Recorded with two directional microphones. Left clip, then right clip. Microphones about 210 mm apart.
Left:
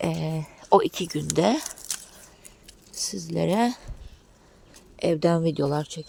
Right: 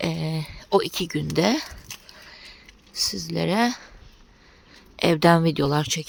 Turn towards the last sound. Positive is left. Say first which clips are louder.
# right 3 dB
turn(degrees=-10)  # may be behind; listen again after turning